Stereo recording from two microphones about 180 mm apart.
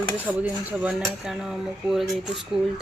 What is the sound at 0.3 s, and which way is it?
Dishes, 10° right (ahead or behind).